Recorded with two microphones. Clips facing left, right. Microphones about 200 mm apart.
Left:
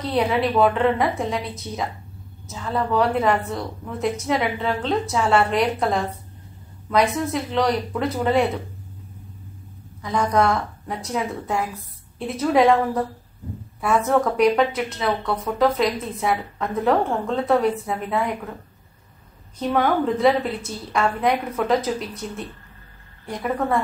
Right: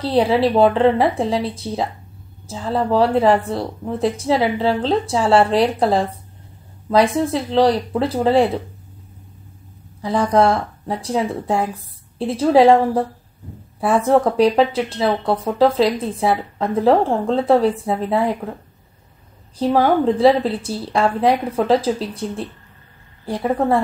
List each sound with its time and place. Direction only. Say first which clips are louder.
0.0 s speech: right 5 dB; 30° right (ahead or behind)
10.0 s speech: right 4 dB; 30° right (ahead or behind)
19.6 s speech: right 5 dB; 30° right (ahead or behind)